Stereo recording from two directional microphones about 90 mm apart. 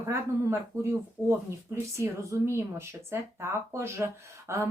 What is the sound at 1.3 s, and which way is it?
Speech, 30° right (ahead or behind).